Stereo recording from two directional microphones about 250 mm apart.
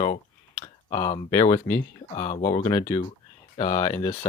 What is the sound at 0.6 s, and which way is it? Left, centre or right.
Speech, centre.